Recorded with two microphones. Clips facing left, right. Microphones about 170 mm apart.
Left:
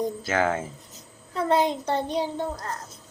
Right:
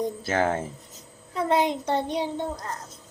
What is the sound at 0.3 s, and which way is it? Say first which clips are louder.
Speech: even; 30° right (ahead or behind).